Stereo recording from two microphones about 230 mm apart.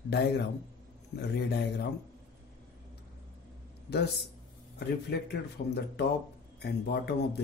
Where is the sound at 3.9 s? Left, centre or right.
Left.